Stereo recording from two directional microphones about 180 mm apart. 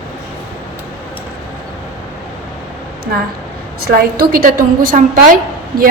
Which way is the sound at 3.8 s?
55° right (ahead or behind).